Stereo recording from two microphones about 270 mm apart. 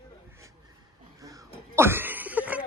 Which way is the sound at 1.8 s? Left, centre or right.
Centre.